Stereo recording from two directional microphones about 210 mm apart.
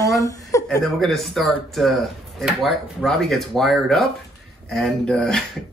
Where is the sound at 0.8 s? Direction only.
Centre (ahead or behind).